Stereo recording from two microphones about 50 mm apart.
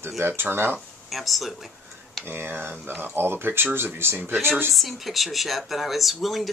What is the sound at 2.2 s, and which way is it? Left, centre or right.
Speech, right.